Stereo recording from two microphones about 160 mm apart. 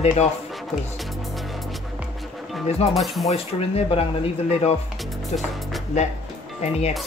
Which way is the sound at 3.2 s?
40° left (ahead or behind).